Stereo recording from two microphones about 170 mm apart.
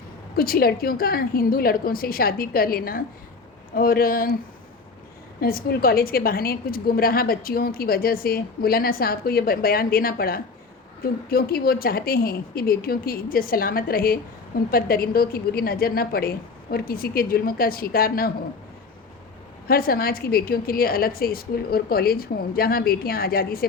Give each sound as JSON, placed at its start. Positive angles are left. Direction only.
{"t": 0.3, "sound": "a woman's voice", "side_deg": 60}
{"t": 5.4, "sound": "a woman's voice", "side_deg": 60}
{"t": 19.6, "sound": "a woman's voice", "side_deg": 60}